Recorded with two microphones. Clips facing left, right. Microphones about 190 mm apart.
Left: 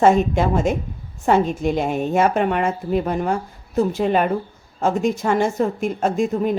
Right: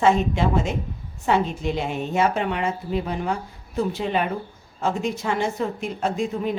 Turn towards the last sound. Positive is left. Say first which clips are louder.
# left 5 dB
turn(degrees=45)  # may be behind; listen again after turning